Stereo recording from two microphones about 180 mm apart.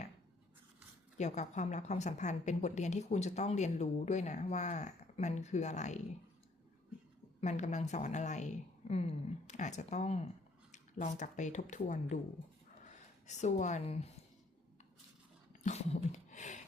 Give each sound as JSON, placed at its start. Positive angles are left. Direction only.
{"t": 1.2, "sound": "a woman's voice", "side_deg": 40}
{"t": 7.4, "sound": "a woman's voice", "side_deg": 40}
{"t": 15.6, "sound": "a sound", "side_deg": 40}